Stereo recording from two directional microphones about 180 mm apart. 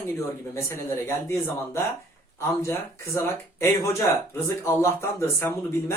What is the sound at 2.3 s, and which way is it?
Speech, 15° left (ahead or behind).